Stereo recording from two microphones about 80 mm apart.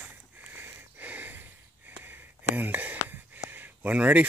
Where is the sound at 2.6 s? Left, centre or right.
Right.